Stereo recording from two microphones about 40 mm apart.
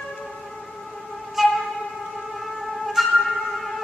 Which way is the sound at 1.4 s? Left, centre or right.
Centre.